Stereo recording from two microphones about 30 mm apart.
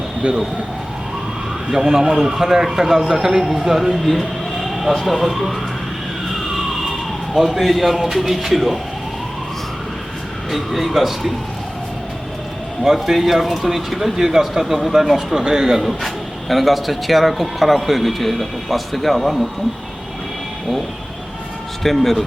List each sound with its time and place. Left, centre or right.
0.2 s speech: right
1.7 s speech: centre
4.0 s a sound: centre
5.2 s speech: centre
7.3 s speech: centre
10.5 s speech: centre
12.8 s speech: centre
15.9 s speech: centre
21.8 s speech: centre